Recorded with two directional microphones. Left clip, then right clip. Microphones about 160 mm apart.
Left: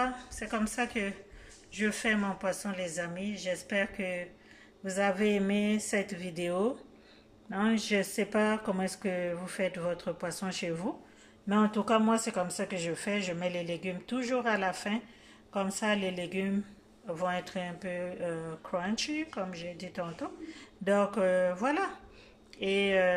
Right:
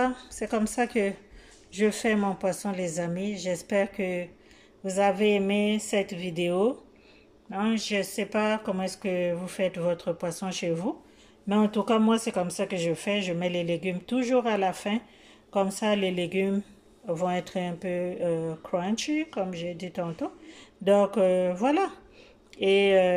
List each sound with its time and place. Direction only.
0.0 s speech: 25° right (ahead or behind)